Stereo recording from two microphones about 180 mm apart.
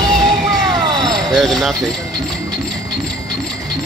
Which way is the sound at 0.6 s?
20° right (ahead or behind).